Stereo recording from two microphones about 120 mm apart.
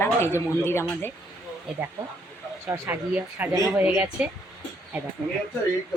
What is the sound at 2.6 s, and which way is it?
Speech, 20° right (ahead or behind).